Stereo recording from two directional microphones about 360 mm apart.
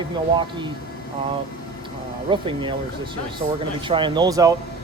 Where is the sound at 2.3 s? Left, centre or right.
Centre.